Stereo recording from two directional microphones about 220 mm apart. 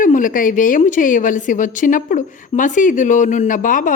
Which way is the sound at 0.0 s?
35° left (ahead or behind).